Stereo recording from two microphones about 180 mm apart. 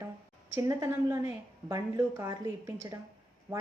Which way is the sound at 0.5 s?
15° right (ahead or behind).